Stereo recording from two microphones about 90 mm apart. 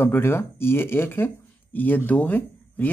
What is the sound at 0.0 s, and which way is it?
Speech, 25° left (ahead or behind).